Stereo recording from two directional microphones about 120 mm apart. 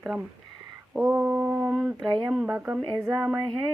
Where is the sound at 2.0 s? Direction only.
35° right (ahead or behind).